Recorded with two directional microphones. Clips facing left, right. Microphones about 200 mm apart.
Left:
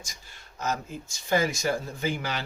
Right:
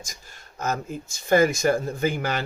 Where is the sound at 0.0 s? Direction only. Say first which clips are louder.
Right 4 dB; 45° right (ahead or behind).